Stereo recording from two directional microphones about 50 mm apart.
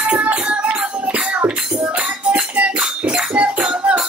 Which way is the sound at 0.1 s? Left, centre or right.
Right.